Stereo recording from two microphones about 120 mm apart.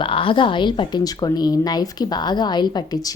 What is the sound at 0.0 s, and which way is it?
A woman's voice, 45° left (ahead or behind).